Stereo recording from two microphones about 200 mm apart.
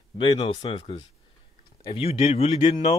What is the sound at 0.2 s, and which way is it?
Speech, 25° left (ahead or behind).